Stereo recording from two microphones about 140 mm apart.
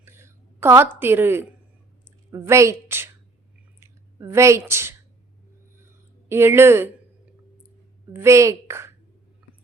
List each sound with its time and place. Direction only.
0.0 s a sound: 15° right (ahead or behind)
0.9 s a woman's voice: 15° right (ahead or behind)
3.8 s clicking: 20° right (ahead or behind)
6.2 s speech: 15° right (ahead or behind)
8.1 s a woman's voice: 20° right (ahead or behind)